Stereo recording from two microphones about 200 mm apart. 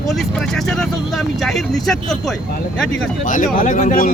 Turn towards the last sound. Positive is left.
turn(degrees=40)  # may be behind; listen again after turning